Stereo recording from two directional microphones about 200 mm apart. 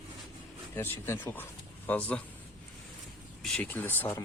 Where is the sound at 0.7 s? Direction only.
10° left (ahead or behind).